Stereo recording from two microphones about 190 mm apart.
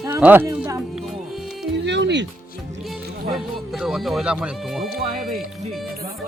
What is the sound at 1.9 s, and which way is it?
Music, 65° right (ahead or behind).